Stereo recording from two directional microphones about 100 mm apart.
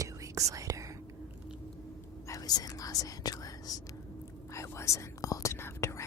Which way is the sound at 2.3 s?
40° left (ahead or behind).